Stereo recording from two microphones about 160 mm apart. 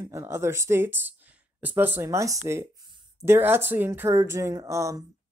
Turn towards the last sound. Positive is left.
turn(degrees=-20)  # may be behind; listen again after turning